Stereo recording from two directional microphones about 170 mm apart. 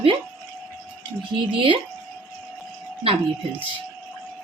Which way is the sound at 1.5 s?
30° right (ahead or behind).